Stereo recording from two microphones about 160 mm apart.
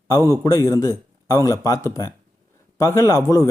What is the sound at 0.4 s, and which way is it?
A man's voice, 20° left (ahead or behind).